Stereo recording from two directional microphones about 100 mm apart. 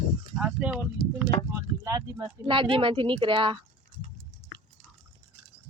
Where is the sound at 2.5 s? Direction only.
55° right (ahead or behind).